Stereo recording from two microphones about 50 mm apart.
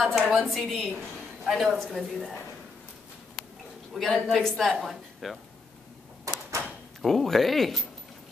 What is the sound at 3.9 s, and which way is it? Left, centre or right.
Speech, centre.